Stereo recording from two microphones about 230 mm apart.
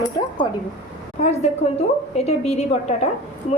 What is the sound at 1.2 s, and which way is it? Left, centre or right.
A woman's voice, left.